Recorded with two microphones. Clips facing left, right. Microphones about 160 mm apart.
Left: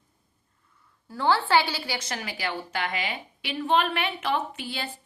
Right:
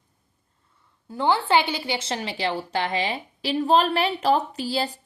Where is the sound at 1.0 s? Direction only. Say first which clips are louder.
Right 2 dB; 20° right (ahead or behind).